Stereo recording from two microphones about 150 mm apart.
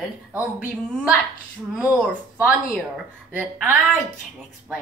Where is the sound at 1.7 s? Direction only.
10° right (ahead or behind).